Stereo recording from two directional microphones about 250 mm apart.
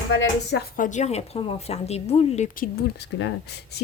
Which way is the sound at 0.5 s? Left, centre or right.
Left.